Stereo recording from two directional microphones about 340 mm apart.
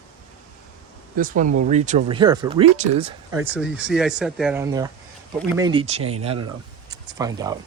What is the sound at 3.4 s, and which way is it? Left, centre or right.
Speech, centre.